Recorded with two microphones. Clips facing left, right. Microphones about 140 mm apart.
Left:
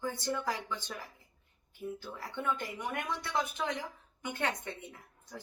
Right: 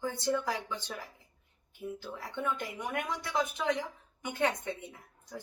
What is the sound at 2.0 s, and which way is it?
Speech, 15° right (ahead or behind).